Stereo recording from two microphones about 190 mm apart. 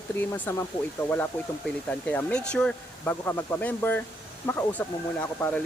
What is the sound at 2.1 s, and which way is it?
Speech, 5° left (ahead or behind).